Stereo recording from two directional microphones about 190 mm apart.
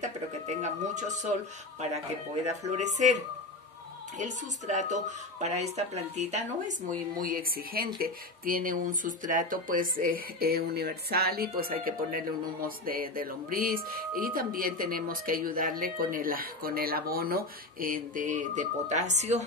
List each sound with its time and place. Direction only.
0.0 s a sound: 40° right (ahead or behind)
2.4 s speech: 35° right (ahead or behind)
4.2 s speech: 40° right (ahead or behind)
7.2 s speech: 50° right (ahead or behind)